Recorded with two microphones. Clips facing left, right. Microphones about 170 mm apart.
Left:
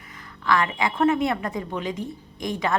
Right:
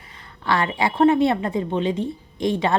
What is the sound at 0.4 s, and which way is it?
A woman's voice, 30° right (ahead or behind).